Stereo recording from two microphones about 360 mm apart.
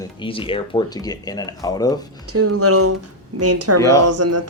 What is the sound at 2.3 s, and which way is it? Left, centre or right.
Speech, right.